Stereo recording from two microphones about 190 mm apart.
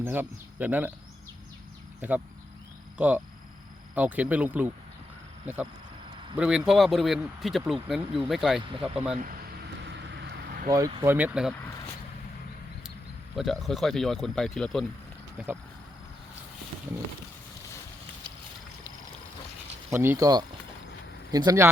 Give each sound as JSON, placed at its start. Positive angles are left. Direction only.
{"t": 0.0, "sound": "speech", "side_deg": -10}
{"t": 2.0, "sound": "speech", "side_deg": -10}
{"t": 6.3, "sound": "speech", "side_deg": -5}
{"t": 9.8, "sound": "vehicle", "side_deg": -65}
{"t": 10.7, "sound": "speech", "side_deg": -20}
{"t": 13.3, "sound": "speech", "side_deg": 0}
{"t": 19.9, "sound": "speech", "side_deg": -15}